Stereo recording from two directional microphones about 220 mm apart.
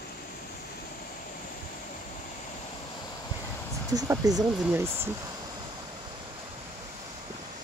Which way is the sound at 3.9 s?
15° right (ahead or behind).